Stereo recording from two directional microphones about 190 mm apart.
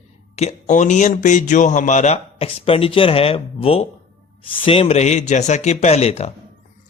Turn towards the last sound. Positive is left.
turn(degrees=35)  # may be behind; listen again after turning